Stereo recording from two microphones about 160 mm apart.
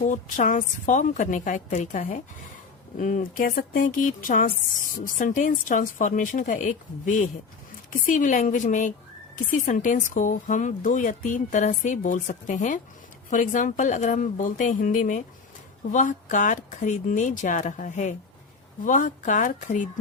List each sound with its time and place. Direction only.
0.0 s speech: 50° left (ahead or behind)